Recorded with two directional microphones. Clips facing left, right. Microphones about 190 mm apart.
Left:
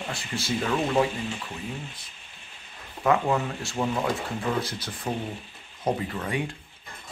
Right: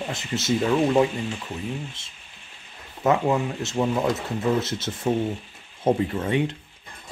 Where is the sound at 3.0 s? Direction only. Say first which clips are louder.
Right 2 dB; 20° right (ahead or behind).